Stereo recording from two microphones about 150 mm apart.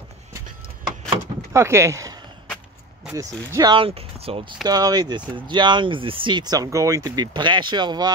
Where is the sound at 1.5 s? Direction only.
20° right (ahead or behind); by 4.6 s 40° right (ahead or behind).